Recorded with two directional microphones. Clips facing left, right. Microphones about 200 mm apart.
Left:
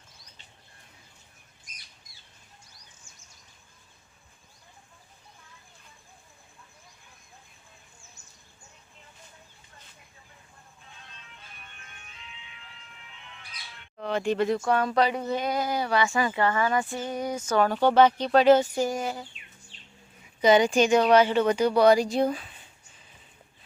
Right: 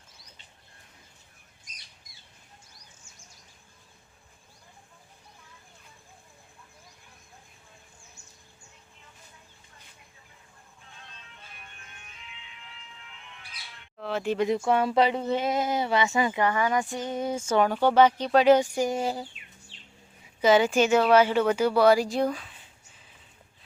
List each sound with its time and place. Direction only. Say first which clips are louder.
14.0 s speech: left 2 dB; 5° right (ahead or behind)
14.3 s speech: right 3 dB; 20° right (ahead or behind)
17.7 s speech: left 1 dB; 10° right (ahead or behind)
18.9 s speech: right 2 dB; 30° right (ahead or behind)
20.4 s a woman's voice: left 1 dB; 5° right (ahead or behind)